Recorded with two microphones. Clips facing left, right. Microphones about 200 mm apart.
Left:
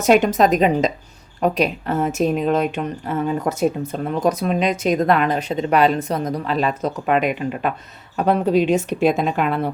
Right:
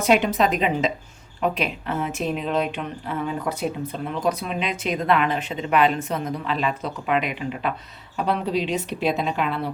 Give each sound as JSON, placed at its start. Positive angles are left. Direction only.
{"t": 0.0, "sound": "a woman's voice", "side_deg": 45}